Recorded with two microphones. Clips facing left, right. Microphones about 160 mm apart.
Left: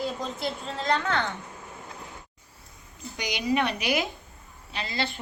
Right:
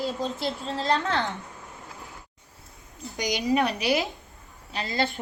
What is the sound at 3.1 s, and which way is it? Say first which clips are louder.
Speech: right 2 dB; 40° right (ahead or behind).